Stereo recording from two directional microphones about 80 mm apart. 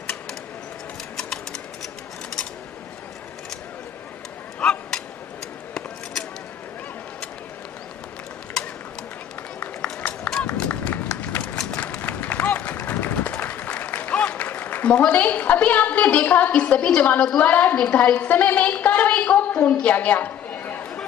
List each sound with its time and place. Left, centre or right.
1.1 s a sound: centre
4.6 s bow-wow: centre
9.6 s run: centre
17.4 s a woman's voice: left
19.8 s chatter: centre